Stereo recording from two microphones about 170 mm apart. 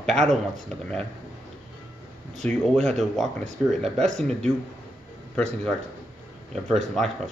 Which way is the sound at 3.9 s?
45° right (ahead or behind).